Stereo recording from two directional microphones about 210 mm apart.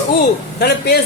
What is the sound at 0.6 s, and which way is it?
Speech, 50° left (ahead or behind).